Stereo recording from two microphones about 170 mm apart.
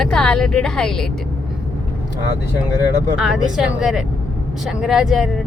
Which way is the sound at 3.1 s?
5° right (ahead or behind).